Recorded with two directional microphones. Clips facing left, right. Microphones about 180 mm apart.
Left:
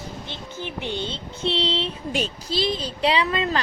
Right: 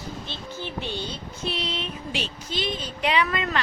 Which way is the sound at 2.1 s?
45° left (ahead or behind).